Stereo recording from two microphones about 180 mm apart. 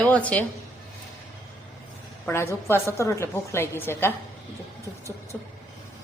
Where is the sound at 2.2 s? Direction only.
15° left (ahead or behind).